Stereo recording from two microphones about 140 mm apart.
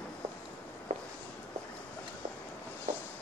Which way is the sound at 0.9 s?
65° right (ahead or behind).